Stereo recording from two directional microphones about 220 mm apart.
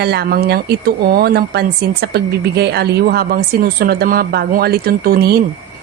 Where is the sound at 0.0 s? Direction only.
45° right (ahead or behind).